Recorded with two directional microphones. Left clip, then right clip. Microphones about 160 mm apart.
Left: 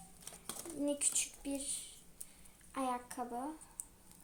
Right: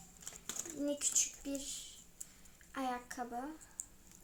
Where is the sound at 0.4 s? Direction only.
20° right (ahead or behind).